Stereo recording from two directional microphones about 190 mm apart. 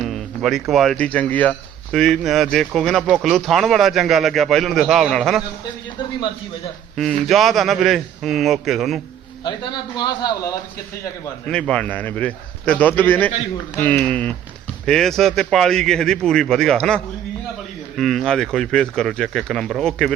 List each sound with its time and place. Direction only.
0.0 s music: centre (ahead or behind)
0.7 s speech: centre (ahead or behind)
6.9 s speech: centre (ahead or behind)
9.4 s a man's voice: 20° left (ahead or behind)
11.4 s a man's voice: 5° left (ahead or behind)